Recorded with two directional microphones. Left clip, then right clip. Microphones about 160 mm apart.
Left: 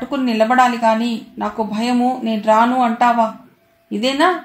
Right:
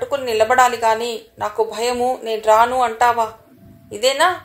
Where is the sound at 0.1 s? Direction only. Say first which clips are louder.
Left 1 dB; 40° right (ahead or behind).